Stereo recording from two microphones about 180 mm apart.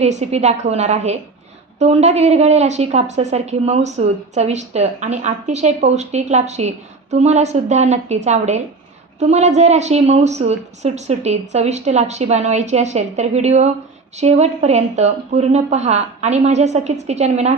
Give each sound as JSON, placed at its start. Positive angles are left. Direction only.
{"t": 0.0, "sound": "a woman's voice", "side_deg": -40}